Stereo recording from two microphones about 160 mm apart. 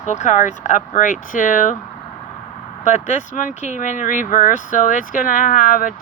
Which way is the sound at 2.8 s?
55° left (ahead or behind).